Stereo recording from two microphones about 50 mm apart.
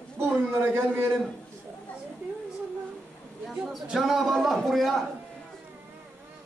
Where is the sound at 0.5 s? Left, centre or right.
Right.